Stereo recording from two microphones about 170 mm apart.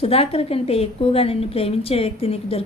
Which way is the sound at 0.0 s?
35° left (ahead or behind).